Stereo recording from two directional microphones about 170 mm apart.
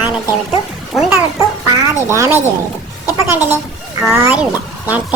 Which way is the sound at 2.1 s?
15° right (ahead or behind).